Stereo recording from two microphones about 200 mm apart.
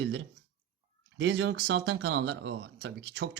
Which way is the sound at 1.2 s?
65° right (ahead or behind).